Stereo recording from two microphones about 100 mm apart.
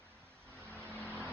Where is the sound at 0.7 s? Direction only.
30° right (ahead or behind).